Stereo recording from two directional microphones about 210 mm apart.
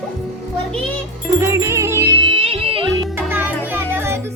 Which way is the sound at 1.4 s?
15° right (ahead or behind).